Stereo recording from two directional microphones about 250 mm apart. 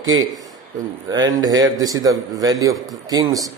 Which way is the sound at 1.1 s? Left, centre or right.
Centre.